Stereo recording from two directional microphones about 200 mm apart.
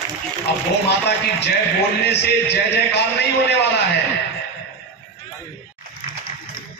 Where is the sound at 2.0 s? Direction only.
55° left (ahead or behind).